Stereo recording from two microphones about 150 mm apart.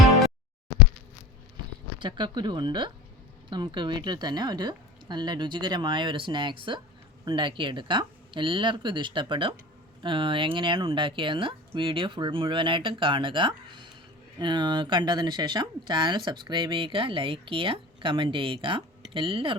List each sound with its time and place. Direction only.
2.0 s speech: 30° right (ahead or behind)